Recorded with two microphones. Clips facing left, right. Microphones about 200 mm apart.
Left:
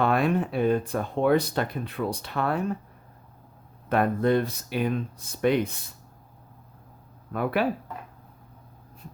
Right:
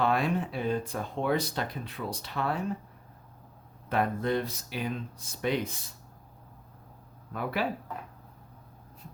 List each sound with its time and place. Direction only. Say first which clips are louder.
0.0 s speech: left 4 dB; 55° left (ahead or behind)
3.8 s speech: left 6 dB; 55° left (ahead or behind)
7.6 s speech: left 5 dB; 60° left (ahead or behind)